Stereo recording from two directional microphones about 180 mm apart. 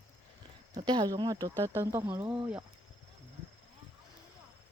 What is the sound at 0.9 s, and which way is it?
Speech, 20° right (ahead or behind).